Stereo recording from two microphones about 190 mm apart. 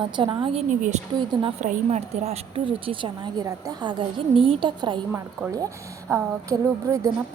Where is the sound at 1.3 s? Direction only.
25° right (ahead or behind).